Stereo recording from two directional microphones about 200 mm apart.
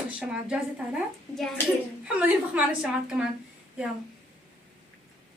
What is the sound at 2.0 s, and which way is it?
A woman's voice, 5° right (ahead or behind).